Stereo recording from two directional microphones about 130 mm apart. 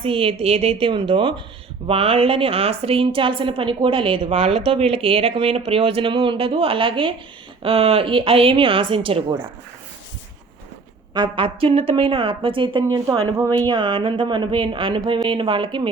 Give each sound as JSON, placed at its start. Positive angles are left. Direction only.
{"t": 0.0, "sound": "speech", "side_deg": -45}
{"t": 11.1, "sound": "speech", "side_deg": -40}
{"t": 12.9, "sound": "speech", "side_deg": -30}